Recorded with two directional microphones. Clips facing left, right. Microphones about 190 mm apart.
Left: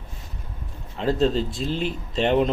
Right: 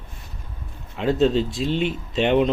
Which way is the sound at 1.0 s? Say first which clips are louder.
Right 2 dB; centre (ahead or behind).